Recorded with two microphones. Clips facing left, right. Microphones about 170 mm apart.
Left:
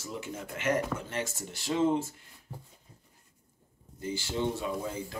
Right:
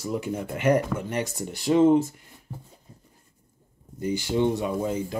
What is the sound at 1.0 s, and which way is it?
Speech, 15° right (ahead or behind).